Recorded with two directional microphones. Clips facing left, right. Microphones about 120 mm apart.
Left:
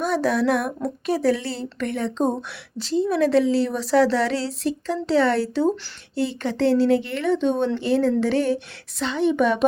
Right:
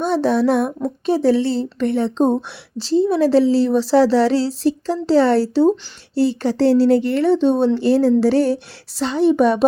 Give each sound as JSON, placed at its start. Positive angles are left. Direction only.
{"t": 0.0, "sound": "speech", "side_deg": -30}